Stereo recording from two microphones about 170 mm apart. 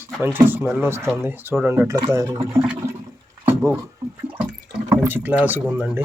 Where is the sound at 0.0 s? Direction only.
10° right (ahead or behind).